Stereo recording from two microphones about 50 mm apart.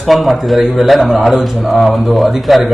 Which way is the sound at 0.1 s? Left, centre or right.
Centre.